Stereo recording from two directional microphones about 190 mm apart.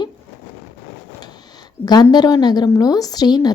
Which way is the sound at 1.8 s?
20° left (ahead or behind).